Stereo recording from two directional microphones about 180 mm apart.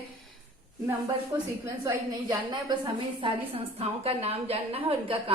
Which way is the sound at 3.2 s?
30° right (ahead or behind).